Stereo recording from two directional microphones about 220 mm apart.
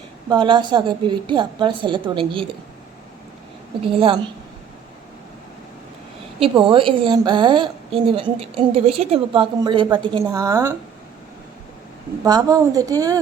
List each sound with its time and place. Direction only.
0.3 s a woman's voice: 20° right (ahead or behind)
3.9 s a woman's voice: 25° right (ahead or behind)
6.4 s a woman's voice: 25° right (ahead or behind)
12.2 s a woman's voice: 15° right (ahead or behind)